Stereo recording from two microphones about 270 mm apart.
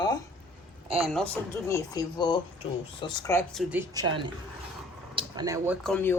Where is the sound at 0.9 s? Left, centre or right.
Centre.